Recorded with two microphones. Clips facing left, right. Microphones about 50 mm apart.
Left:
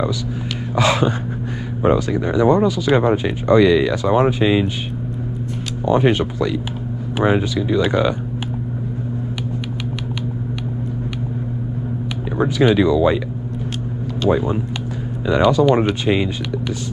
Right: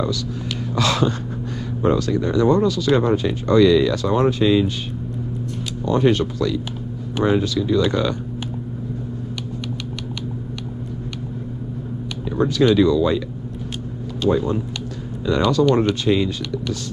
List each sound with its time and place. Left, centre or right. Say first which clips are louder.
0.7 s speech: left 3 dB; centre
5.9 s speech: left 2 dB; left
12.4 s speech: even; centre
14.3 s speech: left 2 dB; left